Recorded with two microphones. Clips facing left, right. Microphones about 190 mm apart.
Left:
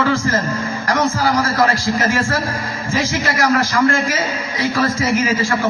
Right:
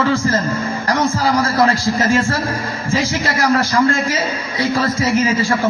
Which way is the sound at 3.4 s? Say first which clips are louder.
Right 1 dB; 25° right (ahead or behind).